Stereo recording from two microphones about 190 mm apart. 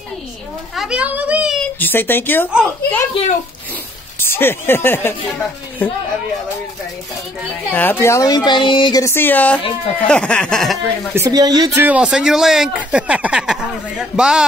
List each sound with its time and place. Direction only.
0.7 s speech: 5° right (ahead or behind)
1.8 s speech: 10° left (ahead or behind)
4.2 s speech: 10° left (ahead or behind)
7.7 s speech: 10° left (ahead or behind)
11.1 s speech: 20° right (ahead or behind)
11.8 s speech: 5° right (ahead or behind)